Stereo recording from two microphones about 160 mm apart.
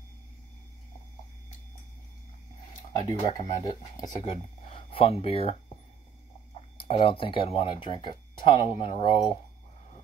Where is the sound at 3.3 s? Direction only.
25° left (ahead or behind).